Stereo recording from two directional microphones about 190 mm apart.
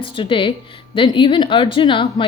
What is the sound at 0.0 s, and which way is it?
A woman's voice, 25° left (ahead or behind).